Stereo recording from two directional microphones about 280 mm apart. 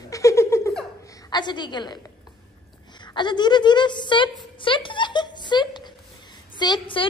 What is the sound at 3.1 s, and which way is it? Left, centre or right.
A woman's voice, centre.